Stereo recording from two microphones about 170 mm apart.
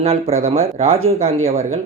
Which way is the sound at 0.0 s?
35° right (ahead or behind).